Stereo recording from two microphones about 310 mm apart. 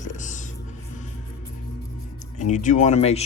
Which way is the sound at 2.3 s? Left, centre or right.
Left.